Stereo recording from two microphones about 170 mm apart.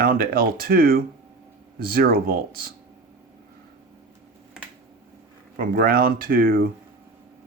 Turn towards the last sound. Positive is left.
turn(degrees=-60)  # may be behind; listen again after turning